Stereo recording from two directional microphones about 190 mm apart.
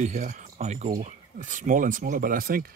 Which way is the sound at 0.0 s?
40° right (ahead or behind).